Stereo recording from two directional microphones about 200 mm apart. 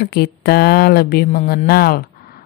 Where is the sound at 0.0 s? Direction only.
50° left (ahead or behind).